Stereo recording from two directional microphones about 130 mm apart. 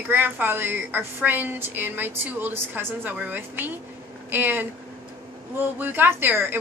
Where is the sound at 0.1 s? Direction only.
15° right (ahead or behind).